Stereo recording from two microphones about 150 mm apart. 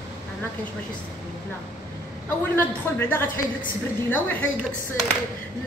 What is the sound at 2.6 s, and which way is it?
A woman's voice, 15° left (ahead or behind).